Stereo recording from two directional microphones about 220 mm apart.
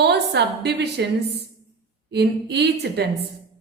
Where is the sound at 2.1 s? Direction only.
50° right (ahead or behind).